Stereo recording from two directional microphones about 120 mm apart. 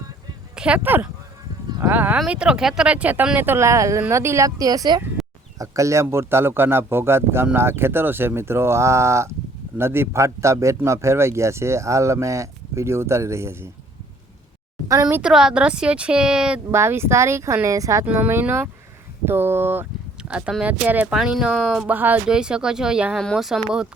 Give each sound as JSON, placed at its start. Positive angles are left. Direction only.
{"t": 0.5, "sound": "a man's voice", "side_deg": -10}
{"t": 14.8, "sound": "a man's voice", "side_deg": -30}
{"t": 15.2, "sound": "speech", "side_deg": -5}
{"t": 16.7, "sound": "a man's voice", "side_deg": -20}
{"t": 18.0, "sound": "speech", "side_deg": -15}